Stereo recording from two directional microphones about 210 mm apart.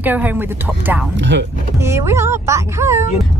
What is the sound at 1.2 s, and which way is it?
Speech, 60° right (ahead or behind).